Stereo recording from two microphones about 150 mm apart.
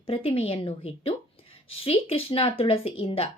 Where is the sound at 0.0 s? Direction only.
40° left (ahead or behind).